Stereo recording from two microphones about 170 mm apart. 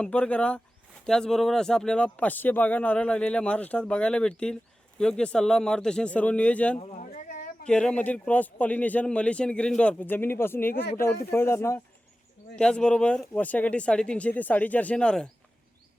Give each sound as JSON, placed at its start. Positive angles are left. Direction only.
{"t": 0.0, "sound": "a man's voice", "side_deg": 10}
{"t": 6.7, "sound": "a sound", "side_deg": 40}
{"t": 7.7, "sound": "speech", "side_deg": 5}